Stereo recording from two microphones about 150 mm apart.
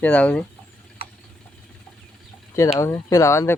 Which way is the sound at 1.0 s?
40° right (ahead or behind).